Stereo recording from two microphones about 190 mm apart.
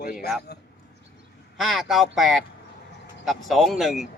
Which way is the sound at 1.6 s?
Centre (ahead or behind).